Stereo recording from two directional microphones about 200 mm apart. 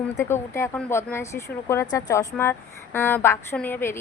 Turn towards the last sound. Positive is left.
turn(degrees=10)  # may be behind; listen again after turning